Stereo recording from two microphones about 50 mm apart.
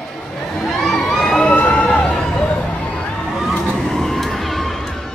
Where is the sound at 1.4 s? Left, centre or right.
Left.